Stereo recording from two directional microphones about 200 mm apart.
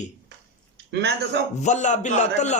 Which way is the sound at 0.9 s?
55° right (ahead or behind).